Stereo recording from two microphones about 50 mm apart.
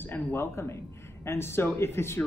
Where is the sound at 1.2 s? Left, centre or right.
Left.